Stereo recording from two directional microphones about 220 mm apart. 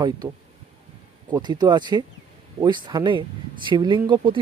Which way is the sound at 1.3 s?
20° right (ahead or behind).